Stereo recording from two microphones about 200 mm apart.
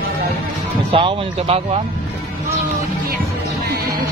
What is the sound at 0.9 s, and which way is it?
Speech, 25° right (ahead or behind).